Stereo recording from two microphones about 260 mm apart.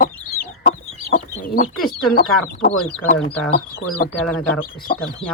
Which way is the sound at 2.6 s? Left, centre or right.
Left.